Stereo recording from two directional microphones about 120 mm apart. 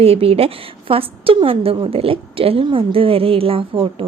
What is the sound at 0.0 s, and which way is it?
A woman's voice, 55° right (ahead or behind).